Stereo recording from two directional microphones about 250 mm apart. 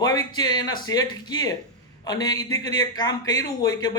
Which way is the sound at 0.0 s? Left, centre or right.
Centre.